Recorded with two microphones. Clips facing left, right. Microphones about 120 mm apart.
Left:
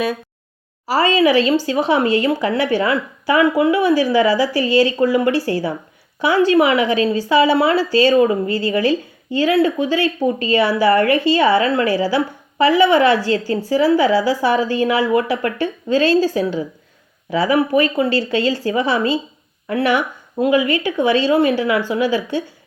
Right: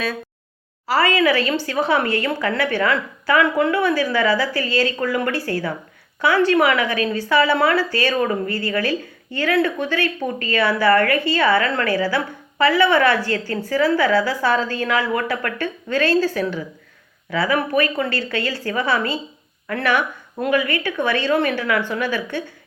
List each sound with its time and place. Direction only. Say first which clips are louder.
0.9 s a woman's voice: left 3 dB; 20° left (ahead or behind)